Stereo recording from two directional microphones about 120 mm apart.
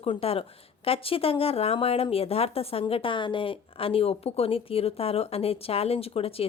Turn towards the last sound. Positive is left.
turn(degrees=55)  # may be behind; listen again after turning